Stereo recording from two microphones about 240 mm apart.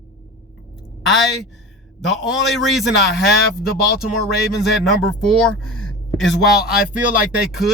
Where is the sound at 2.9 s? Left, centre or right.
Left.